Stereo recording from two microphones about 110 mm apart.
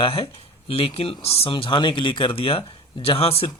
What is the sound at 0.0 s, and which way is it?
Speech, 60° left (ahead or behind).